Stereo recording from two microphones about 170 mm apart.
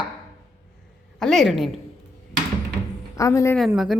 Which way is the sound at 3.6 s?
Centre (ahead or behind).